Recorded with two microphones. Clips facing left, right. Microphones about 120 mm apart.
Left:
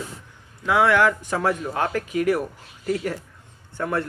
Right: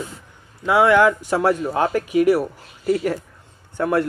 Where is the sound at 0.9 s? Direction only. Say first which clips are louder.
Right 4 dB; 10° right (ahead or behind).